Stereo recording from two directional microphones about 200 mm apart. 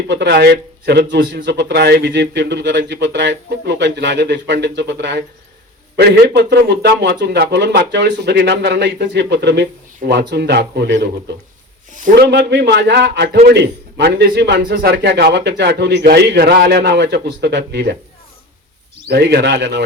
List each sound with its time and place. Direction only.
0.1 s a man's voice: 60° right (ahead or behind)
11.9 s a sound: 40° right (ahead or behind)
12.3 s a man's voice: 60° right (ahead or behind)
19.0 s a man's voice: 55° right (ahead or behind)